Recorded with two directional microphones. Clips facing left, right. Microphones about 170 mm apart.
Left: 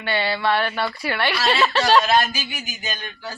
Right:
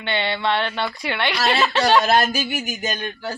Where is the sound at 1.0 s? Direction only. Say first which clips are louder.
Left 1 dB; 20° right (ahead or behind).